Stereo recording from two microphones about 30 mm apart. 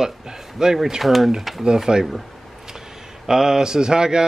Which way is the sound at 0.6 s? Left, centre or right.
Right.